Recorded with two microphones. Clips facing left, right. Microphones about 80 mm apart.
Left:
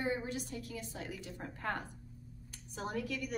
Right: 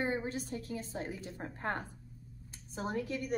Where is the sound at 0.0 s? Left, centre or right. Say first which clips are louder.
Right 2 dB; right.